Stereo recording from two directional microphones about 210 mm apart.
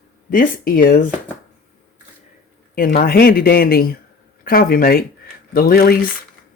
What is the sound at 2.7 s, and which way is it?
Speech, 45° left (ahead or behind).